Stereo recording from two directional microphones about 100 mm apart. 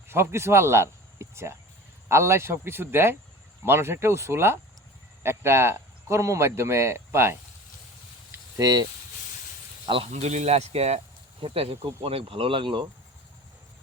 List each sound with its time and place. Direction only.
0.1 s speech: 25° right (ahead or behind)
8.5 s speech: 45° right (ahead or behind)
9.8 s speech: 65° right (ahead or behind); by 11.0 s 90° right
11.3 s speech: 70° right (ahead or behind)